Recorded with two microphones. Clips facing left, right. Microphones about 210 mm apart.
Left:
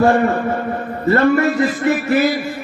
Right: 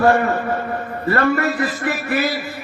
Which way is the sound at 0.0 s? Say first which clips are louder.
Left 2 dB; 25° left (ahead or behind).